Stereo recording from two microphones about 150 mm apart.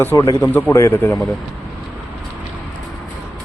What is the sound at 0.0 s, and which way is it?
A man's voice, 15° left (ahead or behind).